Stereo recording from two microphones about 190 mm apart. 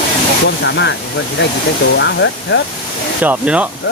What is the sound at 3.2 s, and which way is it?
Speech, 5° right (ahead or behind).